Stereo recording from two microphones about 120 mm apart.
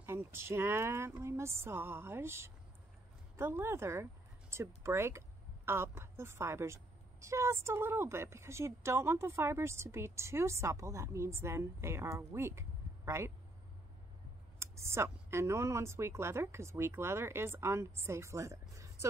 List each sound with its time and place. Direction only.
0.0 s a woman's voice: 20° right (ahead or behind)
14.6 s a woman's voice: 20° right (ahead or behind)